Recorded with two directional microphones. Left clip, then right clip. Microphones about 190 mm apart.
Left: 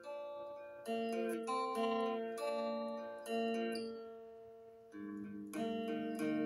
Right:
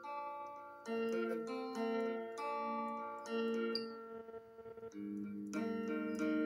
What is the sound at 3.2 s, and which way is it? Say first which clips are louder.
Music: left 2 dB; 25° left (ahead or behind).